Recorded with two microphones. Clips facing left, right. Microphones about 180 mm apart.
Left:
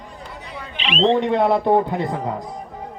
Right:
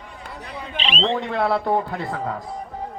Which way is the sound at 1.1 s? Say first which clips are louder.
Left 4 dB; 20° left (ahead or behind).